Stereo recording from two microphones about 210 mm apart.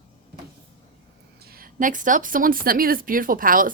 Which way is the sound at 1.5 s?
40° right (ahead or behind).